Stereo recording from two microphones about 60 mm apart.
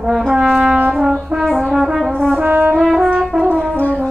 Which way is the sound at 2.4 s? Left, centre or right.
Right.